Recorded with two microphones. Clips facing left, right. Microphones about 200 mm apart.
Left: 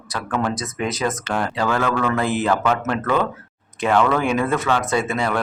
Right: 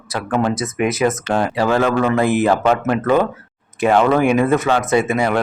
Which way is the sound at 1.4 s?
15° right (ahead or behind).